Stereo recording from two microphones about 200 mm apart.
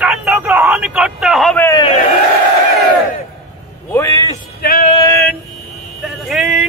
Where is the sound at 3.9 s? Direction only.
15° left (ahead or behind).